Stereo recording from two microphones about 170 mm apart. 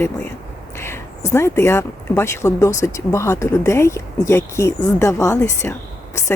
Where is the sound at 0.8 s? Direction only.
15° left (ahead or behind).